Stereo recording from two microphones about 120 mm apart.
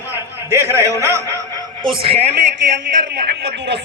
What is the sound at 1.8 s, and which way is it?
Speech, 45° right (ahead or behind).